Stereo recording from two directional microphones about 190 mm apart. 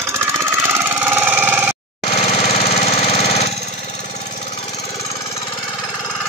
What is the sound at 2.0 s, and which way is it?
Engine, 30° left (ahead or behind).